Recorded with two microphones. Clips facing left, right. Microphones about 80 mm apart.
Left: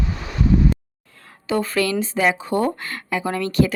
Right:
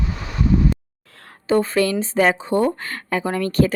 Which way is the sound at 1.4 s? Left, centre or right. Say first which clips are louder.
Right 3 dB; right.